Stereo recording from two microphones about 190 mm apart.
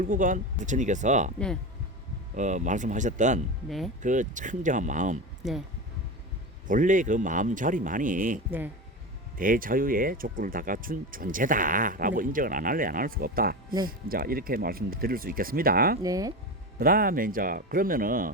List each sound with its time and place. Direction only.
0.0 s speech: 45° right (ahead or behind)
2.3 s speech: 40° right (ahead or behind)
5.4 s speech: centre (ahead or behind)
6.7 s speech: 45° right (ahead or behind)
9.4 s speech: 45° right (ahead or behind)
16.0 s speech: 20° right (ahead or behind)
16.7 s speech: 50° right (ahead or behind)